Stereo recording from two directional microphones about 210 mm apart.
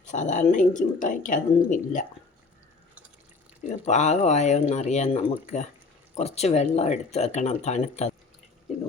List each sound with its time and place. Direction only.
0.0 s a woman's voice: 35° left (ahead or behind)
3.7 s a woman's voice: 35° left (ahead or behind)